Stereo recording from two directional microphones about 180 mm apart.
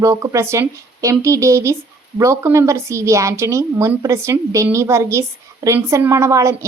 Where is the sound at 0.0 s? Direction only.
15° right (ahead or behind).